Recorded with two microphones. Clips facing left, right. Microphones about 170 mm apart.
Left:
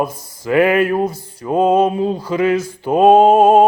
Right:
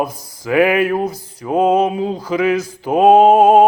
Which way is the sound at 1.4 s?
10° right (ahead or behind).